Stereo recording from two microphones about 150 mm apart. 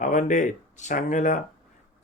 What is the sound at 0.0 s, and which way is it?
Speech, 60° left (ahead or behind).